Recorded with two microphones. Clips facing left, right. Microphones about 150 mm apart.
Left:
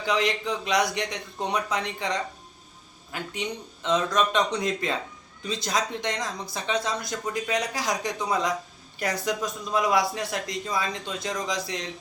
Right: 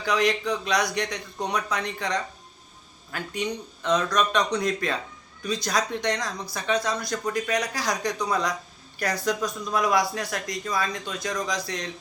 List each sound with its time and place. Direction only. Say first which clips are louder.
0.0 s speech: right 2 dB; 25° left (ahead or behind)